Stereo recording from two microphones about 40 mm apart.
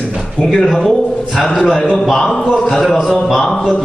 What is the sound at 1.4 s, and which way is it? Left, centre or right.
Speech, left.